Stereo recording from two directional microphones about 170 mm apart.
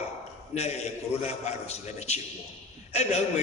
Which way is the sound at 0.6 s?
40° left (ahead or behind).